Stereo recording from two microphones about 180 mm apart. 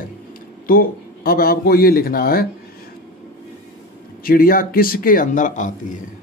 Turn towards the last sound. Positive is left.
turn(degrees=45)  # may be behind; listen again after turning